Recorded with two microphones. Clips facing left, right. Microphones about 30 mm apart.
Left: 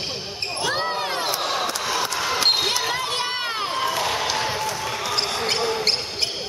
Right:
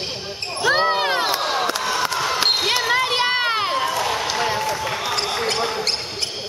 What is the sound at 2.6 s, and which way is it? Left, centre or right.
Basketball bounce, centre.